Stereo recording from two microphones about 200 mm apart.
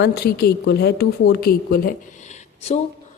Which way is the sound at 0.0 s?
55° left (ahead or behind).